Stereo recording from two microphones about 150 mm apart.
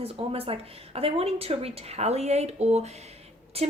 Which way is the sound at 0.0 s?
40° right (ahead or behind).